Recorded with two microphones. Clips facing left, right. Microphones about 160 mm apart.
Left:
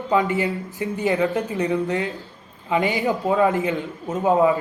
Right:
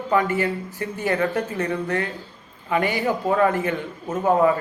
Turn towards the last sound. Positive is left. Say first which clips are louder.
# left 1 dB
turn(degrees=15)  # may be behind; listen again after turning